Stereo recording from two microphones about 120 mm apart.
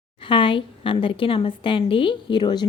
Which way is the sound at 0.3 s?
45° left (ahead or behind).